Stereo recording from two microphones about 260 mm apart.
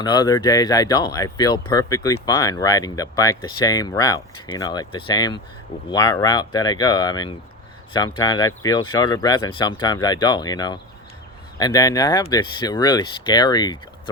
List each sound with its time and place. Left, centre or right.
0.0 s speech: centre